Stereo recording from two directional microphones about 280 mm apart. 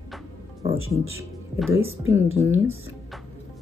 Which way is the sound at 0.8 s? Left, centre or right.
Right.